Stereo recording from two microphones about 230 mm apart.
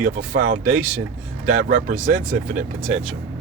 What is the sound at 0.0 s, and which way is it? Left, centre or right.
Speech, right.